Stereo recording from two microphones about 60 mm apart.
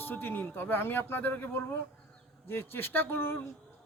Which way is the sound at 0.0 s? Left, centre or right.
Left.